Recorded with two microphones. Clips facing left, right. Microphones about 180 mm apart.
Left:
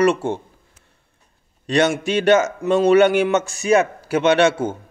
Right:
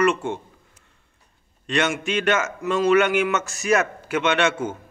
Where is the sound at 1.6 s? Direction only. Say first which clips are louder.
Left 5 dB; 35° left (ahead or behind).